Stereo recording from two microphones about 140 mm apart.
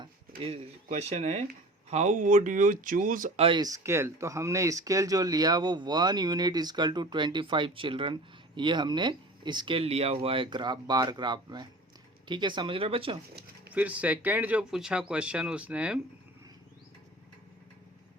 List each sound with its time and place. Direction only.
0.0 s speech: 40° right (ahead or behind); by 3.3 s 75° right (ahead or behind)
3.3 s speech: 40° right (ahead or behind)
3.6 s speech: 20° right (ahead or behind); by 13.1 s 45° right (ahead or behind)
13.7 s speech: 10° right (ahead or behind)